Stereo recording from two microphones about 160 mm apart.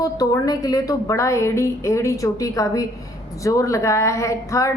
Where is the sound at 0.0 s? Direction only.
25° left (ahead or behind).